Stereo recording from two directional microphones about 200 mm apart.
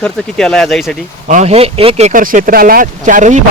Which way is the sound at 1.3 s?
35° right (ahead or behind).